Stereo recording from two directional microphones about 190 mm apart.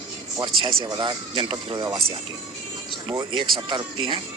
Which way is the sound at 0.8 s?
25° right (ahead or behind).